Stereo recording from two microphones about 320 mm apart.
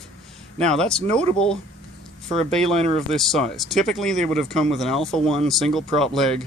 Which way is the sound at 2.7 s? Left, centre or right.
Centre.